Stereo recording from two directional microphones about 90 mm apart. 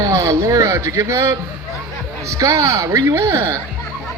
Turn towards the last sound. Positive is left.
turn(degrees=-30)  # may be behind; listen again after turning